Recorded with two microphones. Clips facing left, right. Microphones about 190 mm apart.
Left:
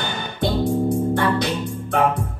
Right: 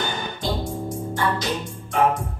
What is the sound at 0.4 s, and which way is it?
Music, 60° left (ahead or behind).